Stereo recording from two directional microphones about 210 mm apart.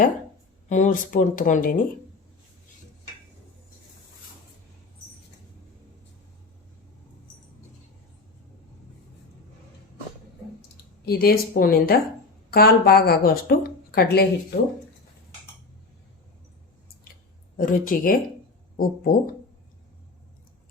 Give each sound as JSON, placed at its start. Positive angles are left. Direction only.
{"t": 0.7, "sound": "speech", "side_deg": 40}
{"t": 11.0, "sound": "a woman's voice", "side_deg": 45}
{"t": 17.6, "sound": "a woman's voice", "side_deg": 40}